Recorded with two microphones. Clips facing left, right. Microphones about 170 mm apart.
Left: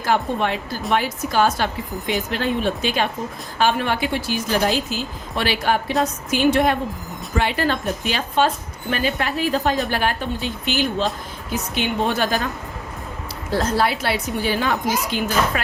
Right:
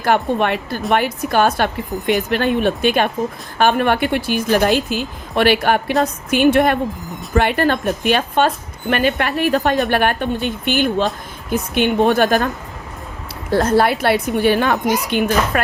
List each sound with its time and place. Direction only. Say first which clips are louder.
0.0 s a woman's voice: right 4 dB; 60° right (ahead or behind)
13.5 s a woman's voice: right 6 dB; 55° right (ahead or behind)